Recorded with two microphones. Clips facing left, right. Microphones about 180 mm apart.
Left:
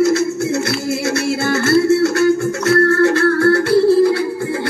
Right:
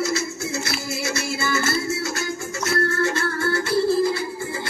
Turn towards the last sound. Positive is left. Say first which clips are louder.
# left 8 dB
turn(degrees=65)  # may be behind; listen again after turning